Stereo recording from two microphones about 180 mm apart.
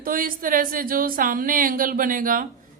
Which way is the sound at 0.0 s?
50° right (ahead or behind).